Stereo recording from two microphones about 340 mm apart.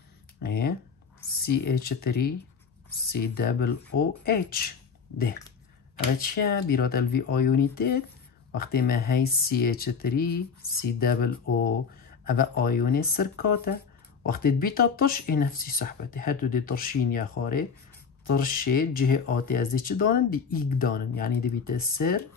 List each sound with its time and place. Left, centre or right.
0.4 s speech: left
18.3 s speech: left